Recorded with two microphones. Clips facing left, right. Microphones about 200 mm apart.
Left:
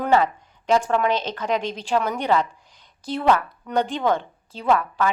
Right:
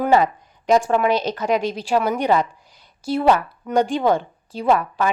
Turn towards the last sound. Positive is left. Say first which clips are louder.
# right 2 dB
turn(degrees=-15)  # may be behind; listen again after turning